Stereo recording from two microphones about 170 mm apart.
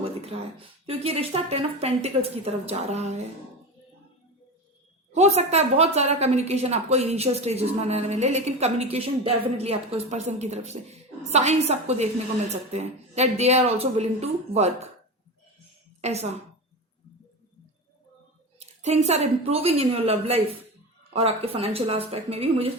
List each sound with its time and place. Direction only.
0.0 s a sound: 35° right (ahead or behind)
0.9 s a woman's voice: 35° right (ahead or behind)
5.1 s a woman's voice: 40° right (ahead or behind)
16.0 s a woman's voice: 40° right (ahead or behind)
18.6 s a woman's voice: 40° right (ahead or behind)